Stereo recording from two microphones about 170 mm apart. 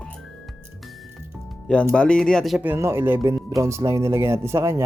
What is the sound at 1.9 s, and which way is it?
Speech, 5° left (ahead or behind).